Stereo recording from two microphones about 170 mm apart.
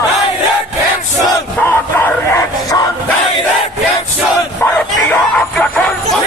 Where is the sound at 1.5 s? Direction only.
10° left (ahead or behind).